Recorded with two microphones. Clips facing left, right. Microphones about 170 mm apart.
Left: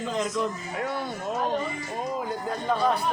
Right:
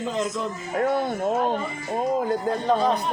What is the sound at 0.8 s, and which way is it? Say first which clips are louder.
Speech: right 9 dB; 50° right (ahead or behind).